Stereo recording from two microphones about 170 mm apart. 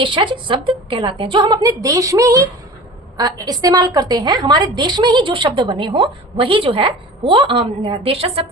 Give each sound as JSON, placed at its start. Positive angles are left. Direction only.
{"t": 0.0, "sound": "a woman's voice", "side_deg": -30}